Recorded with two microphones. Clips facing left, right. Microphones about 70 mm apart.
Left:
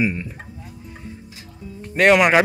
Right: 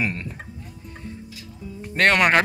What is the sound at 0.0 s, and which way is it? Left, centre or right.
Speech, centre.